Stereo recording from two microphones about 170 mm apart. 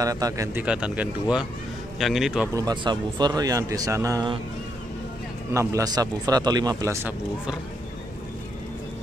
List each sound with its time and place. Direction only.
0.0 s a man's voice: 20° right (ahead or behind)
0.7 s a man's voice: 5° right (ahead or behind)
2.5 s a man's voice: 25° right (ahead or behind)
5.5 s a man's voice: 15° right (ahead or behind)